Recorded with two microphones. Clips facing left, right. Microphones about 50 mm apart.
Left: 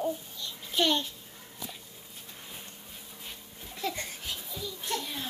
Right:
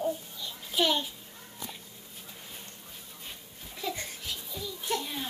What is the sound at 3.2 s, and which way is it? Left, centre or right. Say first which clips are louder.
Babbling: even; centre.